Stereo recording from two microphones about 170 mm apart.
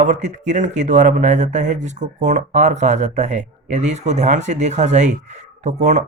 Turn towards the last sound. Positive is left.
turn(degrees=-45)  # may be behind; listen again after turning